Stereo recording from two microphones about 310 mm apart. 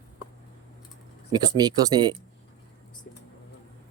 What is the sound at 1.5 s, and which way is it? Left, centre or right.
Speech, centre.